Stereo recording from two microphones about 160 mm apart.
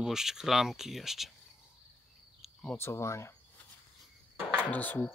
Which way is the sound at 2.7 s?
15° left (ahead or behind).